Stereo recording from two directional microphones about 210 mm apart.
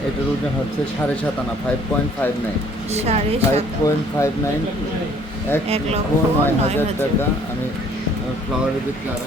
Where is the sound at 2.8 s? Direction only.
30° right (ahead or behind).